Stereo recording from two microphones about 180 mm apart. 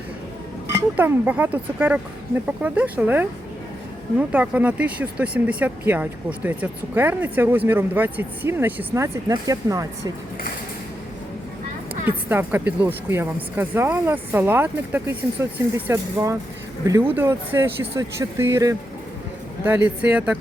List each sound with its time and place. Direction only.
0.7 s speech: 15° right (ahead or behind)
12.0 s speech: 10° right (ahead or behind)